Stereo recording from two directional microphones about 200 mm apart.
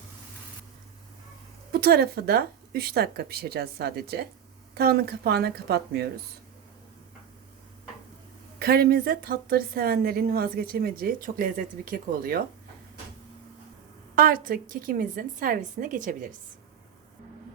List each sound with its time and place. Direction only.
1.7 s a woman's voice: 50° right (ahead or behind)
8.5 s a woman's voice: 50° right (ahead or behind)
14.2 s a woman's voice: 45° right (ahead or behind)